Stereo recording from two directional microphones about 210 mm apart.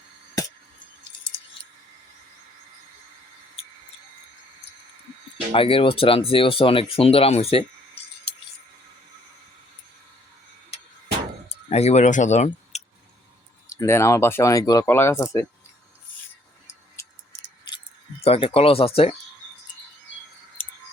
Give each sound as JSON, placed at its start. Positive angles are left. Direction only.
{"t": 5.5, "sound": "speech", "side_deg": 25}
{"t": 11.4, "sound": "speech", "side_deg": 30}
{"t": 12.7, "sound": "a sound", "side_deg": 30}
{"t": 13.7, "sound": "speech", "side_deg": 15}
{"t": 17.7, "sound": "keys jangling", "side_deg": 20}
{"t": 18.2, "sound": "speech", "side_deg": 25}